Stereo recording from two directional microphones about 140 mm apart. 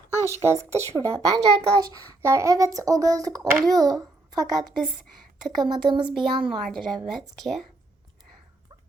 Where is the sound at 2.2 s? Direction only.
20° right (ahead or behind); by 6.1 s 35° right (ahead or behind).